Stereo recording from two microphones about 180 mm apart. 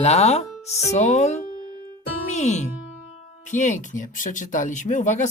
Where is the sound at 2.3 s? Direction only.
40° left (ahead or behind).